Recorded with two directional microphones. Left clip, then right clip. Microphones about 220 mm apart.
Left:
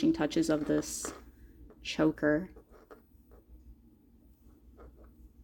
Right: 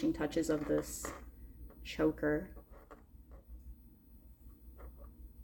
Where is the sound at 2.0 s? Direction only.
45° left (ahead or behind).